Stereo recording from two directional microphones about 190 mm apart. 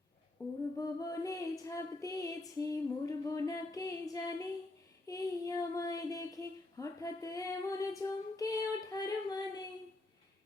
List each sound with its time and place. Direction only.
0.4 s child singing: 15° left (ahead or behind)